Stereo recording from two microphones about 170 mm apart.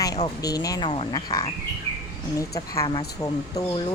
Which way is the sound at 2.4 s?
20° left (ahead or behind).